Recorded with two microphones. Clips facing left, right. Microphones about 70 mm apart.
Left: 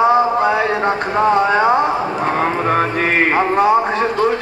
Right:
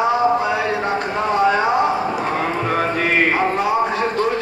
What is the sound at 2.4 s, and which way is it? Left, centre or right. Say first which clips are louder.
Music: left 6 dB; left.